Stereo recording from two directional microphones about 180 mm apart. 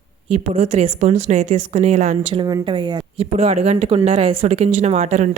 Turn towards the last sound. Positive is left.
turn(degrees=-40)  # may be behind; listen again after turning